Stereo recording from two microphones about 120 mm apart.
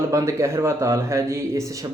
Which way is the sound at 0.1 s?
25° right (ahead or behind).